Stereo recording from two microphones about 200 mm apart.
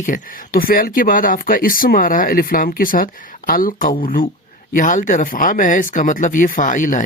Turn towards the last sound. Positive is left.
turn(degrees=40)  # may be behind; listen again after turning